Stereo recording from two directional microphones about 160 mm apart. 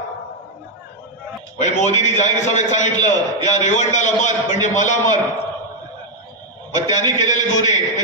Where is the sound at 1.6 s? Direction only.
45° left (ahead or behind).